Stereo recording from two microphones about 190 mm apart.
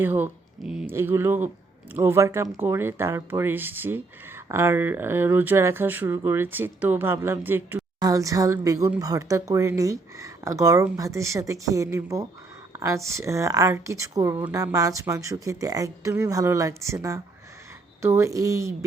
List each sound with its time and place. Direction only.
0.0 s speech: 10° right (ahead or behind)